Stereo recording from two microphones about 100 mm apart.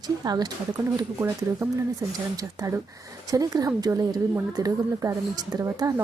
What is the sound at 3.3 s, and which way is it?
Speech, 40° right (ahead or behind).